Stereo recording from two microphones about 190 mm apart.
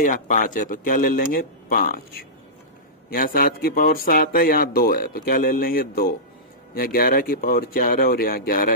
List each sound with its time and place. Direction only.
0.0 s speech: 45° left (ahead or behind)
3.1 s speech: 50° left (ahead or behind)